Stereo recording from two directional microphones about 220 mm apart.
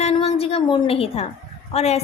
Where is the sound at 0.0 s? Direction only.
30° left (ahead or behind).